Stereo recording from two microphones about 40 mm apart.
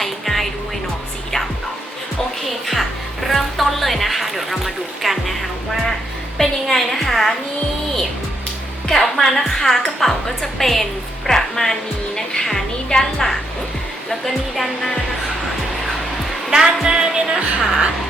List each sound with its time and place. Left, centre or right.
0.0 s music: centre
2.5 s music: centre
6.4 s music: centre
6.7 s a sound: centre
8.9 s a woman's voice: centre
16.5 s speech: centre
16.8 s music: centre